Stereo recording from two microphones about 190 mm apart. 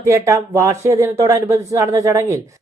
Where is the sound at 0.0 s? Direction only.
15° right (ahead or behind).